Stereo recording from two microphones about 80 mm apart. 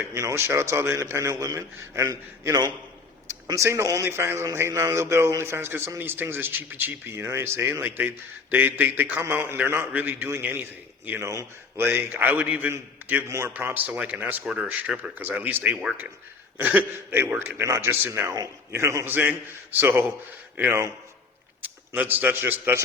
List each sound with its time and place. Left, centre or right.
0.0 s a man's voice: right
11.2 s a man's voice: right
11.8 s speech: right
13.2 s a man's voice: right
13.5 s a man's voice: right
19.0 s a man's voice: right